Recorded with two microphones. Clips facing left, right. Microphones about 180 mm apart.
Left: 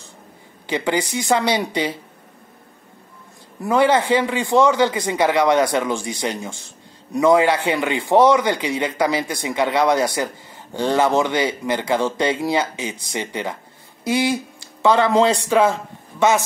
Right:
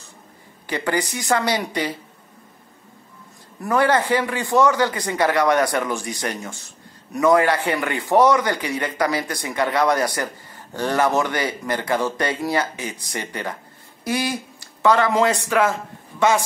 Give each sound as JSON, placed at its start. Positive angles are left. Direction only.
{"t": 0.7, "sound": "a man's voice", "side_deg": 15}
{"t": 3.6, "sound": "a man's voice", "side_deg": 20}